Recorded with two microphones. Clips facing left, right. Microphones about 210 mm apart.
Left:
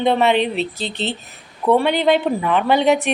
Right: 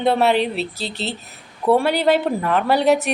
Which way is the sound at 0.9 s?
40° right (ahead or behind).